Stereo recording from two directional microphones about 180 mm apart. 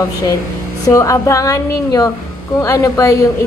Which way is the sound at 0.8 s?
15° left (ahead or behind).